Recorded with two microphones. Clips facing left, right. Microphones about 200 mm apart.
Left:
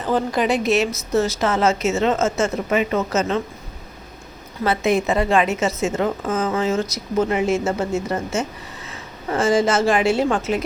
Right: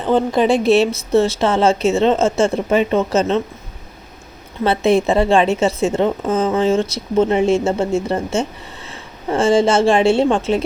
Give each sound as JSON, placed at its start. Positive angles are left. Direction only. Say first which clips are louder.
{"t": 0.0, "sound": "a woman's voice", "louder": "right 5 dB", "side_deg": -25}
{"t": 4.6, "sound": "a woman's voice", "louder": "right 4 dB", "side_deg": -30}